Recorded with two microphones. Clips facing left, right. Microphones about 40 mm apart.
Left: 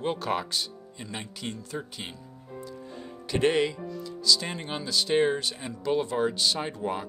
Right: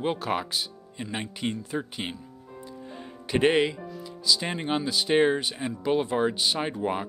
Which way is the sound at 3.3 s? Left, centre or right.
Right.